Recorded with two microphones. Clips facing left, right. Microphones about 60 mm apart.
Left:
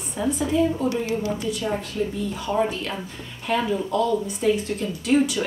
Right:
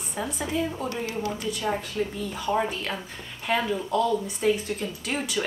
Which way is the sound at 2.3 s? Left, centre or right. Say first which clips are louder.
Left 2 dB; centre.